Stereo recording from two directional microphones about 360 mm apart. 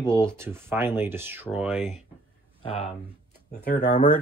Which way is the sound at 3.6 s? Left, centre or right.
Left.